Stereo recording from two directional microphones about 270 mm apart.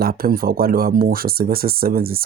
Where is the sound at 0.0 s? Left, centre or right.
Right.